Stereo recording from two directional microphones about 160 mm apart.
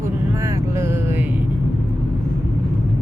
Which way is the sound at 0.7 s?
15° right (ahead or behind).